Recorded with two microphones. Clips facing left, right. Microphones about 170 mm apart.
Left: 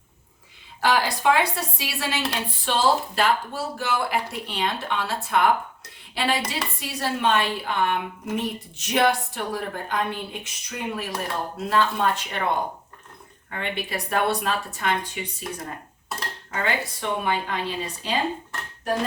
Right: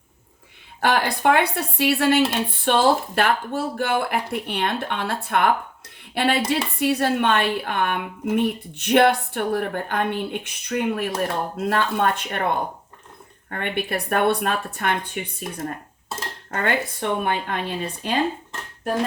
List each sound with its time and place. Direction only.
0.8 s speech: 60° right (ahead or behind)
13.5 s speech: 55° right (ahead or behind)
16.5 s speech: 55° right (ahead or behind)